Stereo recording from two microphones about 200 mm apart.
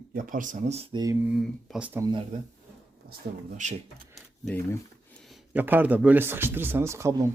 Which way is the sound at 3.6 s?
35° right (ahead or behind).